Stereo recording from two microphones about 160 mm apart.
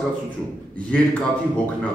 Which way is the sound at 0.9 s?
10° left (ahead or behind).